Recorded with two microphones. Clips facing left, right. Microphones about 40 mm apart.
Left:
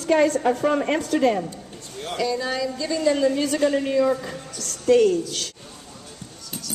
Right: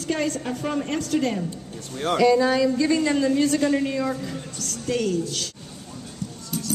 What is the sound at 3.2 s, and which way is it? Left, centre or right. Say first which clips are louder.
A woman's voice: even; centre.